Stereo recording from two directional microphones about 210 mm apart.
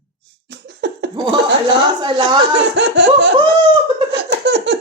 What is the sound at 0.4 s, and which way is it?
Laughter, 55° right (ahead or behind).